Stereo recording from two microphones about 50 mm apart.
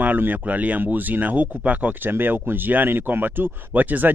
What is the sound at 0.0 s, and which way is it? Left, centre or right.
Speech, right.